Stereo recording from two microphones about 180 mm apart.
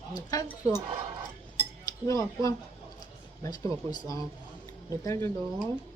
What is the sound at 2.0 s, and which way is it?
Speech, 20° left (ahead or behind).